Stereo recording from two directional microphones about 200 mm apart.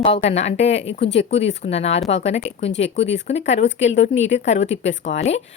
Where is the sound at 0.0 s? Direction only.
30° left (ahead or behind).